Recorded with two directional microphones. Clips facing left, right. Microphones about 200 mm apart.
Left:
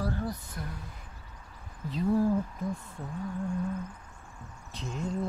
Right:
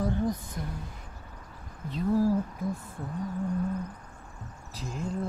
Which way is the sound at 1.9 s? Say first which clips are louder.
Even; centre (ahead or behind).